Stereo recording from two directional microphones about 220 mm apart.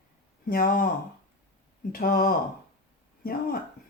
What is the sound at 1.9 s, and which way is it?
Speech, 40° left (ahead or behind).